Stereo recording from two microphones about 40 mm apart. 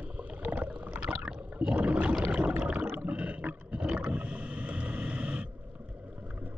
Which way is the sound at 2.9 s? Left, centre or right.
Right.